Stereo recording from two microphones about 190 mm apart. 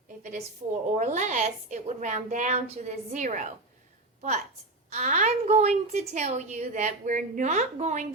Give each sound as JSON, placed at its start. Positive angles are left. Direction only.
{"t": 0.2, "sound": "a woman's voice", "side_deg": -40}
{"t": 4.9, "sound": "a woman's voice", "side_deg": -40}